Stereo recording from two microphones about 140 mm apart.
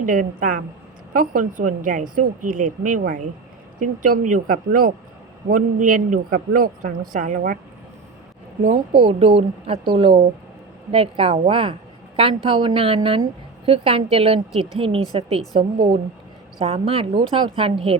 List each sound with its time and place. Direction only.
0.0 s a woman's voice: 70° right (ahead or behind); by 4.9 s 90° right
5.5 s a woman's voice: 75° right (ahead or behind)
7.1 s a woman's voice: 65° right (ahead or behind)
8.6 s a woman's voice: 40° right (ahead or behind)